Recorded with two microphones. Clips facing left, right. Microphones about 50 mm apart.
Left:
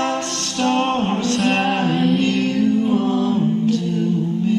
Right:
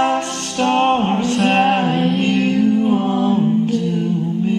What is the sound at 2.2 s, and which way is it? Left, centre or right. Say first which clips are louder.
Music: right 2 dB; right.